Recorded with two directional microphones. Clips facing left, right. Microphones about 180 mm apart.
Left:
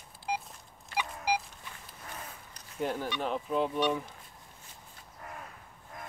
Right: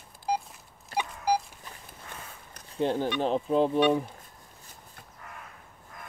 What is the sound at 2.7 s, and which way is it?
Speech, 30° right (ahead or behind).